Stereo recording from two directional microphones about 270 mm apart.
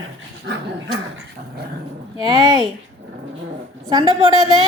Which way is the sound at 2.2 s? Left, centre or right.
Centre.